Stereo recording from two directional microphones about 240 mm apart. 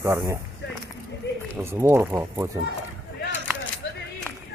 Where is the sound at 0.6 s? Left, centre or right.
Left.